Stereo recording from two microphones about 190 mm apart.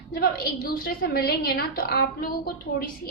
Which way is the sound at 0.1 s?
50° left (ahead or behind).